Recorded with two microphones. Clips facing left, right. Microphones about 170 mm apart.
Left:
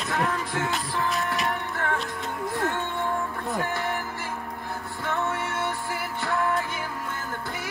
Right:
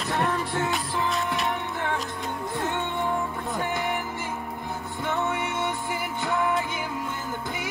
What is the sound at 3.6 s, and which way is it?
Music, 20° right (ahead or behind).